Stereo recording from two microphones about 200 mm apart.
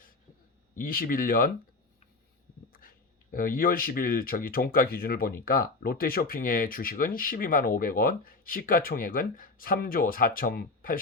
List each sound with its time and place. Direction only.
0.8 s speech: 45° left (ahead or behind)
3.3 s speech: 45° left (ahead or behind)